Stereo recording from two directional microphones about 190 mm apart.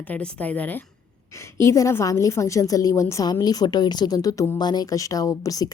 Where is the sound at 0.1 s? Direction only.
10° left (ahead or behind).